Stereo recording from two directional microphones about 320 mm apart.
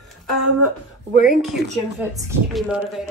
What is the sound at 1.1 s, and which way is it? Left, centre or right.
Speech, left.